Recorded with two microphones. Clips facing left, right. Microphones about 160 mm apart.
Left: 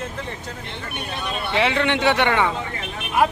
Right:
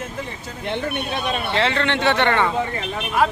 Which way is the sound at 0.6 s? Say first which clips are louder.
Right 13 dB; 60° right (ahead or behind).